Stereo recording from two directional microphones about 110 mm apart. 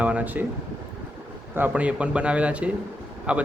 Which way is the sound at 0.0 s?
15° right (ahead or behind).